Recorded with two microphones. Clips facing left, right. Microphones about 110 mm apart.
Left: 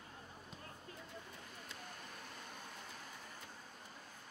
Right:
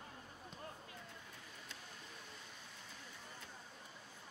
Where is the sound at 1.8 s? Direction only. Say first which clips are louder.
Left 3 dB; 55° left (ahead or behind).